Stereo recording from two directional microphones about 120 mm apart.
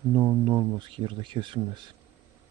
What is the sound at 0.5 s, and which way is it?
Speech, 45° right (ahead or behind).